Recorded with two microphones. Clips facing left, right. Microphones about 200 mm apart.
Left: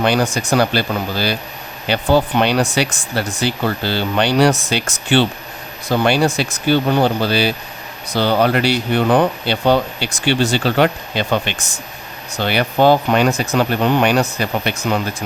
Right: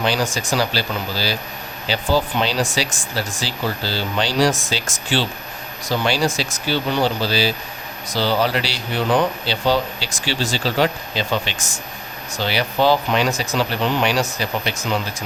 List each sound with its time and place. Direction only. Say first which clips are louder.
0.0 s speech: left 5 dB; 60° left (ahead or behind)